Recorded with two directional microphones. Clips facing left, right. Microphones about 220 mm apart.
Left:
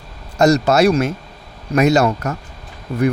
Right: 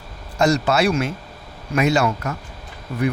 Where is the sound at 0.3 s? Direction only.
40° left (ahead or behind).